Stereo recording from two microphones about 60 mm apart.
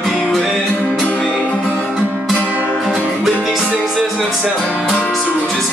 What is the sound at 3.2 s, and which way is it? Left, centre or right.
Music, centre.